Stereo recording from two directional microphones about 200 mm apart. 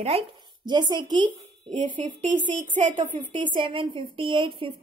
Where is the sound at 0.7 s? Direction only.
20° right (ahead or behind).